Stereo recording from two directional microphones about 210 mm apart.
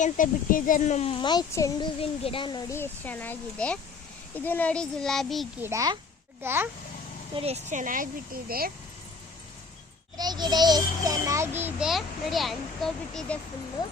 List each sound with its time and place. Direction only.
0.0 s a child's voice: 40° left (ahead or behind); by 5.5 s centre (ahead or behind)
5.6 s a child's voice: 15° right (ahead or behind)
7.3 s speech: 30° right (ahead or behind)
10.2 s a child's voice: 20° right (ahead or behind); by 13.4 s 5° left (ahead or behind)